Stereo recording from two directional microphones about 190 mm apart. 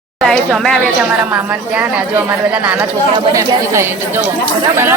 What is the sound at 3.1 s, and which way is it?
Speech, 20° right (ahead or behind).